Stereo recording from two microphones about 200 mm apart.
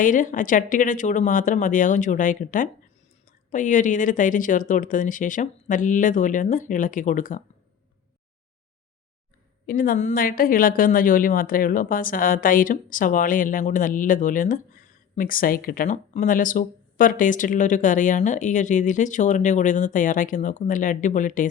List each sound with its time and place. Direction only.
0.0 s a woman's voice: 40° left (ahead or behind)
9.6 s a woman's voice: 45° left (ahead or behind)